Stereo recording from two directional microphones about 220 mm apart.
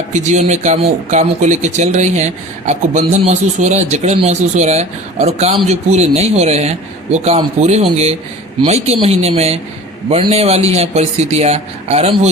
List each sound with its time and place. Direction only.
0.1 s a man's voice: 30° right (ahead or behind)